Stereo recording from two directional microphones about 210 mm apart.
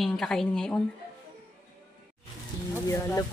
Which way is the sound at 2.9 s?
15° left (ahead or behind).